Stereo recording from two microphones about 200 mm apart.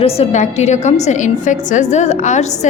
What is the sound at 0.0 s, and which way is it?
A woman's voice, 30° left (ahead or behind).